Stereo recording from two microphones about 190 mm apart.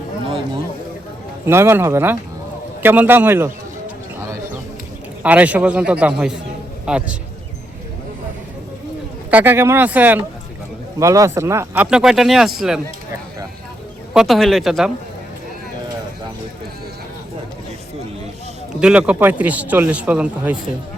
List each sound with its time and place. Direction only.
1.5 s speech: 15° right (ahead or behind)
5.2 s speech: 10° right (ahead or behind)
9.3 s speech: 10° right (ahead or behind)
14.1 s speech: centre (ahead or behind)
18.8 s speech: 5° right (ahead or behind)